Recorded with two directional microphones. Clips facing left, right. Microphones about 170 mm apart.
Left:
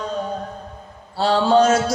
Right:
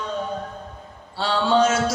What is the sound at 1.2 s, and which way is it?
Mantra, 40° left (ahead or behind).